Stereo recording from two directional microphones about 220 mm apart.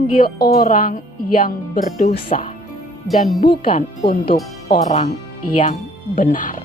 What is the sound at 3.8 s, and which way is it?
A woman's voice, 30° left (ahead or behind).